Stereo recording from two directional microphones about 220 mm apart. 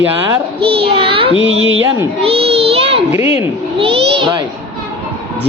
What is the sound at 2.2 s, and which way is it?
A child's voice, 25° right (ahead or behind).